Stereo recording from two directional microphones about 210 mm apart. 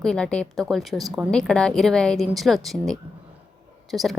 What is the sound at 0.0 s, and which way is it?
A woman's voice, 5° left (ahead or behind).